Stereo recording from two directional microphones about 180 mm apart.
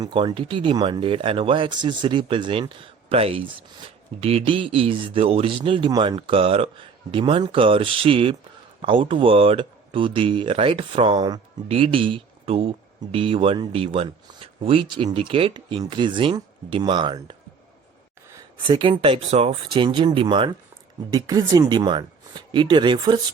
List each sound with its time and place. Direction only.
0.0 s speech: 25° right (ahead or behind)
18.6 s speech: 30° right (ahead or behind)